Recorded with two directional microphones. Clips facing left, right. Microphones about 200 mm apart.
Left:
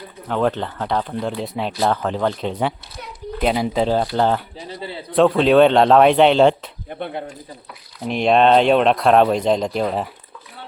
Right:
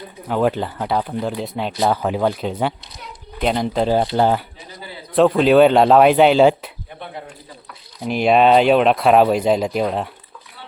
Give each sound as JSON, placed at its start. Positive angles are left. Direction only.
{"t": 0.3, "sound": "speech", "side_deg": -10}
{"t": 4.2, "sound": "speech", "side_deg": -5}
{"t": 4.7, "sound": "a man's voice", "side_deg": 30}
{"t": 5.1, "sound": "speech", "side_deg": 0}
{"t": 8.0, "sound": "speech", "side_deg": -5}